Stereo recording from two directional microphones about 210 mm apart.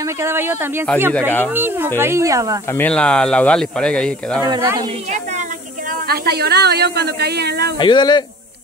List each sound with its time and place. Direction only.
0.2 s speech: 10° right (ahead or behind)
2.8 s speech: 5° left (ahead or behind)
4.4 s speech: 15° right (ahead or behind)
6.0 s a woman's voice: 50° right (ahead or behind)
7.8 s speech: 20° left (ahead or behind)